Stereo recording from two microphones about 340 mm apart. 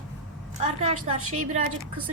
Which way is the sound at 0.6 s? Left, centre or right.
Centre.